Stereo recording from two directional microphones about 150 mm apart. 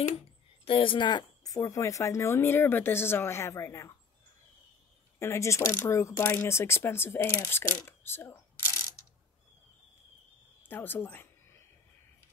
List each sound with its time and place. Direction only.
0.7 s speech: 35° left (ahead or behind); by 3.9 s 20° left (ahead or behind)
5.2 s speech: 20° left (ahead or behind)
10.7 s a sound: 15° left (ahead or behind)